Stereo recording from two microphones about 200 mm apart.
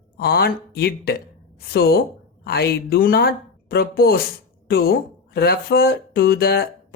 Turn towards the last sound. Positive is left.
turn(degrees=50)  # may be behind; listen again after turning